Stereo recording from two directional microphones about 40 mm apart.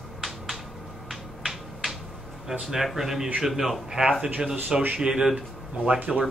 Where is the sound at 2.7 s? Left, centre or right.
Centre.